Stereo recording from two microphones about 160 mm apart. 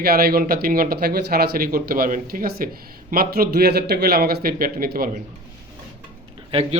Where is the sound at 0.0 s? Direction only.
75° right (ahead or behind).